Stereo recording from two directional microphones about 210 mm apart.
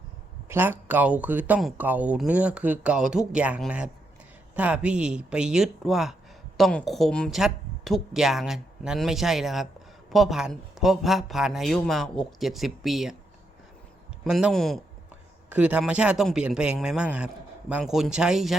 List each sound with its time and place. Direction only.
0.4 s a man's voice: 10° right (ahead or behind)
14.3 s a man's voice: centre (ahead or behind)